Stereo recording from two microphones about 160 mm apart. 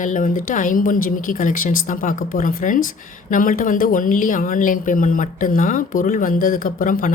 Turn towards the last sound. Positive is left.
turn(degrees=55)  # may be behind; listen again after turning